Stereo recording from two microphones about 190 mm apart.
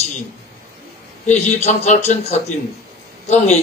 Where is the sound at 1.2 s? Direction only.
35° left (ahead or behind).